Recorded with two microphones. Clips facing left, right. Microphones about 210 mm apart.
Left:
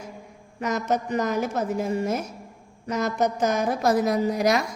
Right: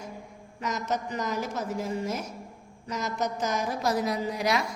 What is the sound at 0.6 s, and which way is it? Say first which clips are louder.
A woman's voice: left 5 dB; 55° left (ahead or behind).